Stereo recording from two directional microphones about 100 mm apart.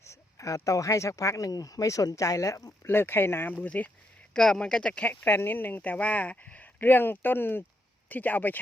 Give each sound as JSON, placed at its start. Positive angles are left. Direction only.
{"t": 0.0, "sound": "speech", "side_deg": 30}
{"t": 2.8, "sound": "speech", "side_deg": 25}